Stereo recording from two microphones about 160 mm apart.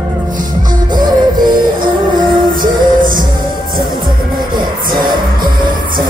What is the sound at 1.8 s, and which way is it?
Music, 60° right (ahead or behind).